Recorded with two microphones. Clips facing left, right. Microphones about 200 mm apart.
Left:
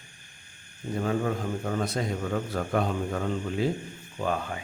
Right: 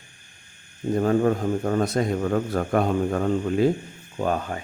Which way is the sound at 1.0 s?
45° right (ahead or behind).